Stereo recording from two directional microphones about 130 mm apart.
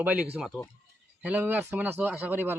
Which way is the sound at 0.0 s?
10° right (ahead or behind).